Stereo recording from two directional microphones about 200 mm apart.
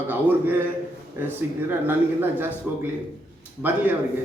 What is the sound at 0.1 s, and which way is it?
Speech, 10° right (ahead or behind).